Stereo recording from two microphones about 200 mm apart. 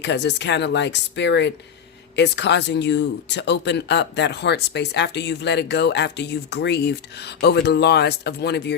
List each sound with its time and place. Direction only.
0.0 s speech: 60° left (ahead or behind)